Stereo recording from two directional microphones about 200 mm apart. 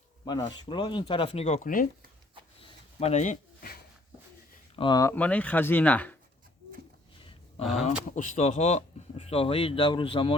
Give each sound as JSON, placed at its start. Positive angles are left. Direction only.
{"t": 0.4, "sound": "speech", "side_deg": 25}
{"t": 2.6, "sound": "a sound", "side_deg": 30}
{"t": 4.8, "sound": "speech", "side_deg": 20}
{"t": 7.6, "sound": "speech", "side_deg": 0}
{"t": 8.1, "sound": "speech", "side_deg": 40}